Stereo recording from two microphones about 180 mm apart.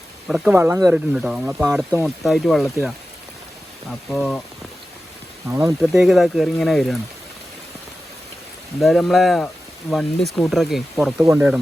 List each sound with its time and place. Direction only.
0.3 s speech: 5° right (ahead or behind)
0.9 s speech: 5° right (ahead or behind)
2.0 s speech: centre (ahead or behind)
4.1 s speech: centre (ahead or behind)
5.5 s speech: 15° right (ahead or behind)
5.8 s speech: centre (ahead or behind)
8.8 s speech: centre (ahead or behind)
11.2 s speech: 15° right (ahead or behind)